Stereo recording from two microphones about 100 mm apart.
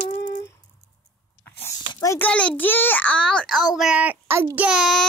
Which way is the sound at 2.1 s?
15° left (ahead or behind).